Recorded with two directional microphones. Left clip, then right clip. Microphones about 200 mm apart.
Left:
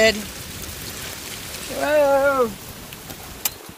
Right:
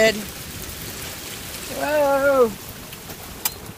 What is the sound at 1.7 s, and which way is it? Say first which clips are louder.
Speech: left 2 dB; 20° left (ahead or behind).